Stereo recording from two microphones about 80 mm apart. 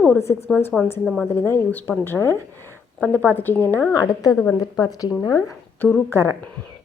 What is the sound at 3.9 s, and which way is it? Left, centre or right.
Speech, left.